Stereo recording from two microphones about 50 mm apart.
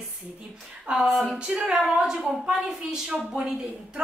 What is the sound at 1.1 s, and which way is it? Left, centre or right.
Speech, centre.